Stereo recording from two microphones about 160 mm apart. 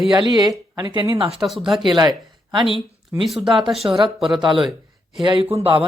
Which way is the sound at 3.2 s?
Centre (ahead or behind).